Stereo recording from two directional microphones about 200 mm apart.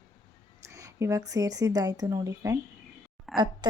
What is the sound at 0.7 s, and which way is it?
Speech, 15° right (ahead or behind).